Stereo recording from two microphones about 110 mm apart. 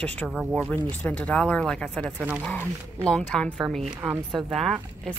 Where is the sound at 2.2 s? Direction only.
10° right (ahead or behind).